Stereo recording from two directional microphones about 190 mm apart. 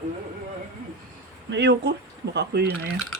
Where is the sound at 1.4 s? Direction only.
65° right (ahead or behind).